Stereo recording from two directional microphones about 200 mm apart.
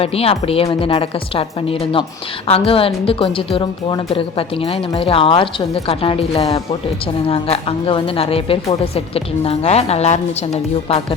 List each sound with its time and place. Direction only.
0.0 s speech: 30° left (ahead or behind)